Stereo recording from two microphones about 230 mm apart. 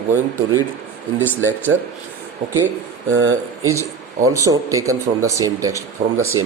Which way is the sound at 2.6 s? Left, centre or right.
Right.